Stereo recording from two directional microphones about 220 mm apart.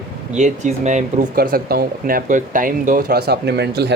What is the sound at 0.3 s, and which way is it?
Speech, 35° right (ahead or behind).